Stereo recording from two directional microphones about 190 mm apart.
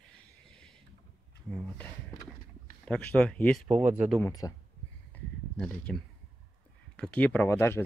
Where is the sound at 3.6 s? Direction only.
10° right (ahead or behind).